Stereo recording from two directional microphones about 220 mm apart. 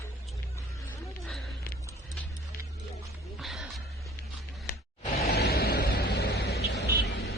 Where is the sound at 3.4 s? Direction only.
Centre (ahead or behind).